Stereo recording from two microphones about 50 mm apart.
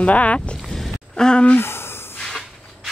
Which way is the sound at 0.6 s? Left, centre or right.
Centre.